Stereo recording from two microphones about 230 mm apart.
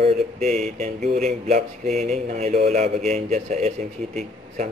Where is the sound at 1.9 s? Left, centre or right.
Centre.